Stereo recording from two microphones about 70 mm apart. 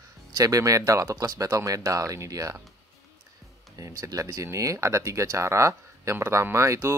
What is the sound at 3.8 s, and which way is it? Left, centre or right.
Speech, right.